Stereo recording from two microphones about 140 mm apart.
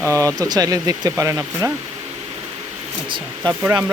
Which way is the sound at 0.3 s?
25° right (ahead or behind).